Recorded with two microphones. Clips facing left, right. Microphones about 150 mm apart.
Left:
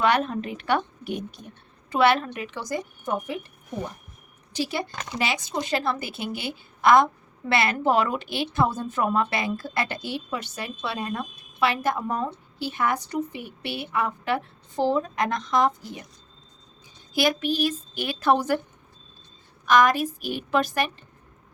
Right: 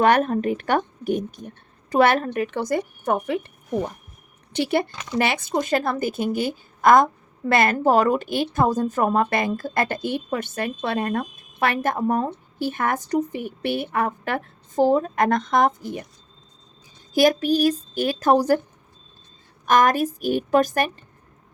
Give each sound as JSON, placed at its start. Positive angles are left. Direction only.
{"t": 0.0, "sound": "a woman's voice", "side_deg": -50}
{"t": 4.5, "sound": "a woman's voice", "side_deg": -60}
{"t": 17.2, "sound": "a woman's voice", "side_deg": -45}
{"t": 19.6, "sound": "a woman's voice", "side_deg": -45}